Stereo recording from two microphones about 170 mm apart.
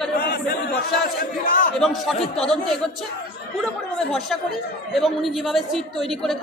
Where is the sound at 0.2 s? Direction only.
65° left (ahead or behind).